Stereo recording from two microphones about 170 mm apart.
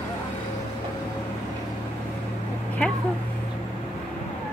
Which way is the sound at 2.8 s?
5° left (ahead or behind).